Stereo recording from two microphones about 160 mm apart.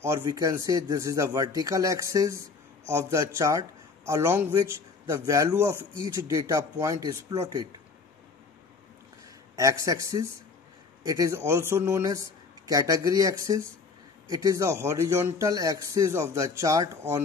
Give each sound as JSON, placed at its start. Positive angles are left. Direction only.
{"t": 0.0, "sound": "speech", "side_deg": -20}
{"t": 9.6, "sound": "speech", "side_deg": -20}